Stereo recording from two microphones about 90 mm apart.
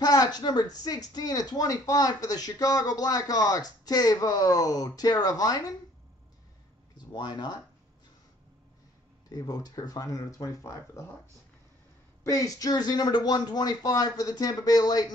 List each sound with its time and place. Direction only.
0.0 s speech: 45° left (ahead or behind)
7.1 s speech: 55° left (ahead or behind)
9.3 s speech: 45° left (ahead or behind)
12.2 s speech: 40° left (ahead or behind)